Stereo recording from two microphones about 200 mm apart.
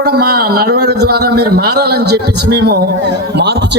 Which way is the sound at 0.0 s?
50° right (ahead or behind).